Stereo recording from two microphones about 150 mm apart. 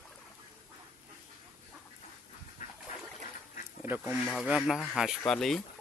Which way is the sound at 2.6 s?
65° left (ahead or behind).